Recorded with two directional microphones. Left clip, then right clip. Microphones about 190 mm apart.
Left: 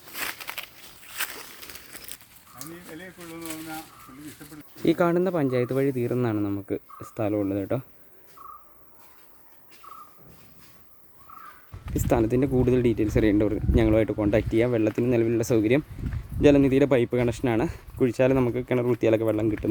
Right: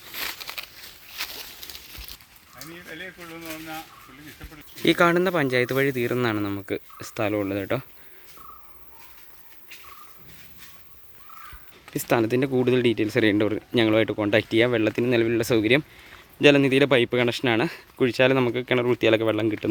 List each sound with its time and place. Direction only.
0.1 s a sound: 5° right (ahead or behind)
4.8 s speech: 5° left (ahead or behind)
12.1 s speech: 5° left (ahead or behind)